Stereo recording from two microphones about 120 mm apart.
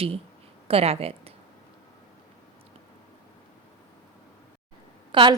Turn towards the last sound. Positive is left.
turn(degrees=-45)  # may be behind; listen again after turning